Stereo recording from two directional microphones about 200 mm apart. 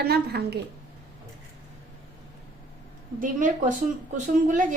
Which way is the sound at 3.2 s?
40° right (ahead or behind).